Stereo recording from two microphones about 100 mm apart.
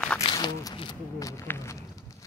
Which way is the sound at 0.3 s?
50° left (ahead or behind).